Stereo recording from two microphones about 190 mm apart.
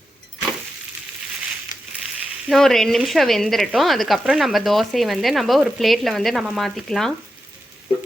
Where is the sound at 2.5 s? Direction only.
Centre (ahead or behind).